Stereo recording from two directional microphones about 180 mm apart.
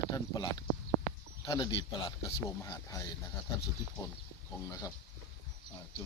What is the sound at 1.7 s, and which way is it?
Speech, 30° left (ahead or behind).